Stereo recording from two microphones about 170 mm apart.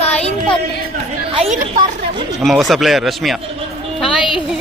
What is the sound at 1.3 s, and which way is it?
Speech, 35° right (ahead or behind).